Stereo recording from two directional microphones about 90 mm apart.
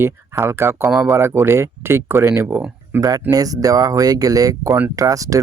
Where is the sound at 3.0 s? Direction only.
45° right (ahead or behind).